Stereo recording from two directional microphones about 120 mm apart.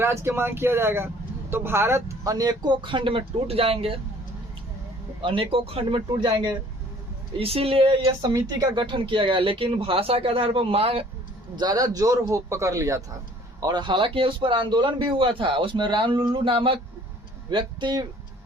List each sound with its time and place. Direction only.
0.0 s speech: 20° right (ahead or behind); by 4.0 s 50° right (ahead or behind)
5.2 s a man's voice: 45° right (ahead or behind)
6.1 s speech: 35° right (ahead or behind)
7.3 s a man's voice: 55° right (ahead or behind)
8.0 s a man's voice: 30° right (ahead or behind); by 11.0 s 55° right (ahead or behind)
11.5 s a man's voice: 35° right (ahead or behind)